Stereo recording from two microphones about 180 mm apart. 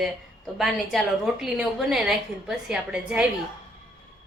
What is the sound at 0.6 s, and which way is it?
A woman's voice, centre (ahead or behind).